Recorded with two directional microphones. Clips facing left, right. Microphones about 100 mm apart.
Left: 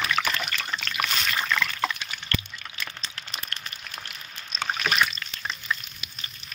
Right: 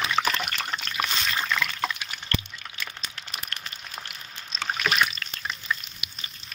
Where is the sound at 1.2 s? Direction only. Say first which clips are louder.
Even; 20° right (ahead or behind).